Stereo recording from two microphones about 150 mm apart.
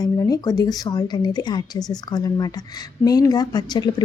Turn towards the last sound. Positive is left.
turn(degrees=30)  # may be behind; listen again after turning